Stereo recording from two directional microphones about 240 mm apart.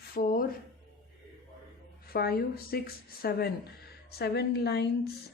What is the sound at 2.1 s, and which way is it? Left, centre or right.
A woman's voice, left.